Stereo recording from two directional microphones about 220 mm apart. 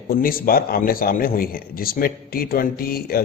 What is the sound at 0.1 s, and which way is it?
A man's voice, 40° left (ahead or behind).